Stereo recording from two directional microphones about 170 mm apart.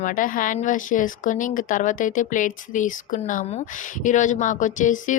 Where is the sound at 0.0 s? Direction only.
50° left (ahead or behind).